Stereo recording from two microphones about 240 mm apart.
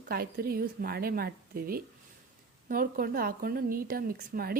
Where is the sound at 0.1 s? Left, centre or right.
Right.